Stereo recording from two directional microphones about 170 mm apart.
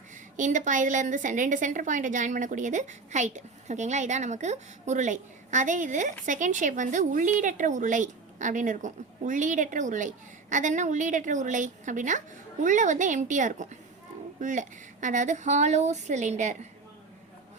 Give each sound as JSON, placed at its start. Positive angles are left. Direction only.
{"t": 0.3, "sound": "a woman's voice", "side_deg": -45}